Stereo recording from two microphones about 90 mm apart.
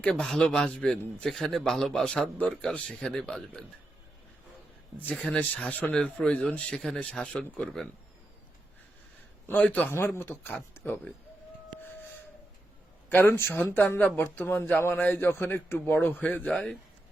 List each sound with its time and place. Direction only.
0.0 s speech: 5° left (ahead or behind)
4.9 s speech: 15° left (ahead or behind)
9.5 s speech: 15° left (ahead or behind)
13.1 s speech: 25° left (ahead or behind)